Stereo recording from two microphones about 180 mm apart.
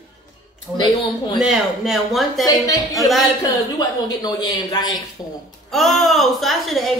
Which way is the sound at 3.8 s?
20° left (ahead or behind).